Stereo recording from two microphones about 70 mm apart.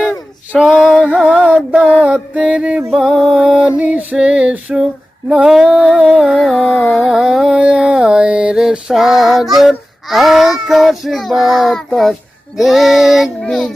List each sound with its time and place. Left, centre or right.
0.6 s male singing: centre
1.2 s music: centre
2.9 s child singing: centre
3.5 s female singing: centre
5.3 s music: centre
11.9 s a child's voice: centre
12.5 s child singing: centre
13.4 s a child's voice: centre